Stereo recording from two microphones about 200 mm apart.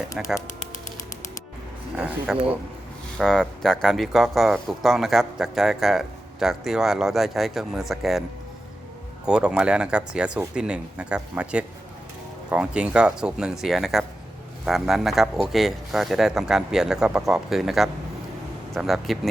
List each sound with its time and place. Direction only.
0.2 s speech: centre (ahead or behind)
2.0 s speech: 5° right (ahead or behind)
9.2 s speech: 5° right (ahead or behind)